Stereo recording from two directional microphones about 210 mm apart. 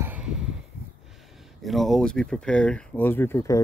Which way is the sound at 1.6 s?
Centre (ahead or behind).